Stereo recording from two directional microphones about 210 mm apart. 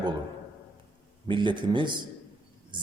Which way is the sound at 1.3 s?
20° right (ahead or behind).